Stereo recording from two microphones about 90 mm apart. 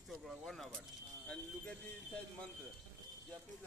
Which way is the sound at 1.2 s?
10° left (ahead or behind).